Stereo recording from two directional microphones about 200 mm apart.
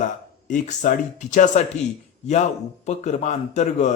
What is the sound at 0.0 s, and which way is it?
A man's voice, 40° left (ahead or behind).